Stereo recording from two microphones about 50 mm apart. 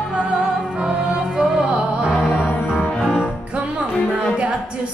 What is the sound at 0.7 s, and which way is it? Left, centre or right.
Music, centre.